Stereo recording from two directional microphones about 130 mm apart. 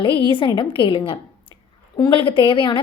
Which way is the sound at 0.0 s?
40° left (ahead or behind).